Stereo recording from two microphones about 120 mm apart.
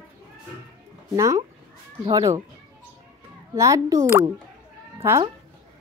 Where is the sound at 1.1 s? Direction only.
25° right (ahead or behind).